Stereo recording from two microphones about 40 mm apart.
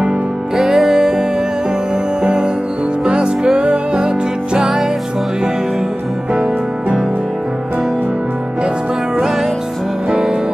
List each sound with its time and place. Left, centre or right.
0.6 s music: centre
2.2 s music: right
6.3 s music: right